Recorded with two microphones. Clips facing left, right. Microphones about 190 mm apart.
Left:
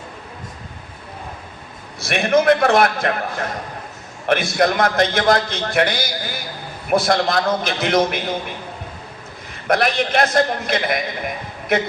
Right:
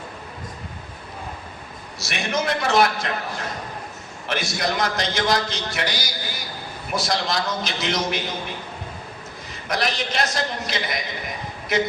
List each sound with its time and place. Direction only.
2.0 s a man's voice: 55° left (ahead or behind)
4.3 s a man's voice: 55° left (ahead or behind)
9.6 s a man's voice: 55° left (ahead or behind)